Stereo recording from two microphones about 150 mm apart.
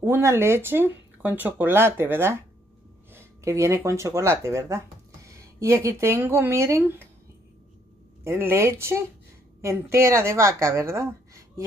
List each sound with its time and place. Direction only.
0.0 s speech: 15° right (ahead or behind)
8.2 s a woman's voice: 15° right (ahead or behind)